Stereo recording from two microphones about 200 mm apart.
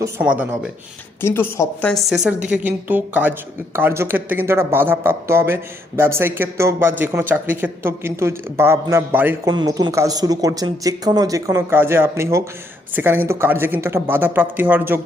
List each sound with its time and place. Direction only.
0.0 s speech: 10° right (ahead or behind)
1.2 s a woman's voice: 10° left (ahead or behind); by 15.0 s 10° right (ahead or behind)